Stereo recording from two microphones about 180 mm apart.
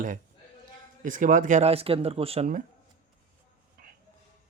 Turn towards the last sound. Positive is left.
turn(degrees=-55)  # may be behind; listen again after turning